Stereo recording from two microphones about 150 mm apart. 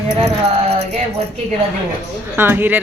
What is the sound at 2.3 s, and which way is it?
Speech, 15° right (ahead or behind).